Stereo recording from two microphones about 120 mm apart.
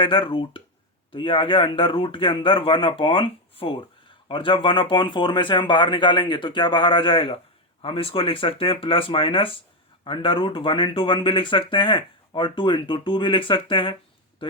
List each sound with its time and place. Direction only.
0.0 s speech: 45° left (ahead or behind)